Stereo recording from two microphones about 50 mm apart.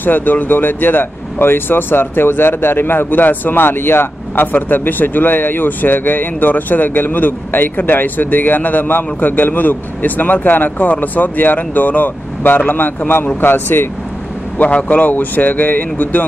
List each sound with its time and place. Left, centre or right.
0.0 s speech: left
4.5 s speech: left
14.6 s speech: left